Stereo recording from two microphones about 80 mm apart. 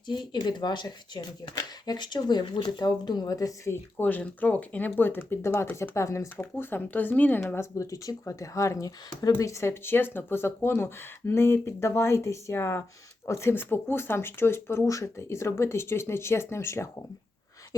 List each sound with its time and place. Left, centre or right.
0.1 s speech: left
3.9 s speech: centre
5.9 s speech: left
6.4 s speech: left
7.4 s speech: left